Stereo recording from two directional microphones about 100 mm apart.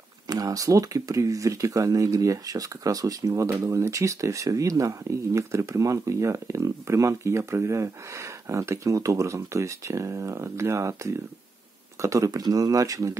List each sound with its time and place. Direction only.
0.3 s speech: 35° right (ahead or behind)